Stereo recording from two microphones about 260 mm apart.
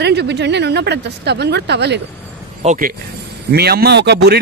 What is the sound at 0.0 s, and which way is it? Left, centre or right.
A man's voice, right.